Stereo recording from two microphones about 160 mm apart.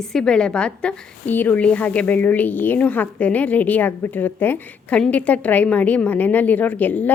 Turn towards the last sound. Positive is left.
turn(degrees=10)  # may be behind; listen again after turning